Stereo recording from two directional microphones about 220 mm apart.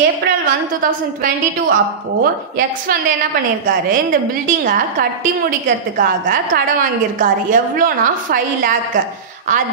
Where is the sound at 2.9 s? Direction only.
40° right (ahead or behind).